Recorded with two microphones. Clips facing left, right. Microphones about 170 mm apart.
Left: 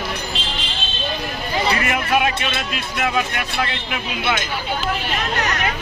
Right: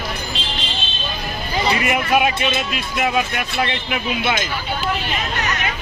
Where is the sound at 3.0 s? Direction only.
15° right (ahead or behind).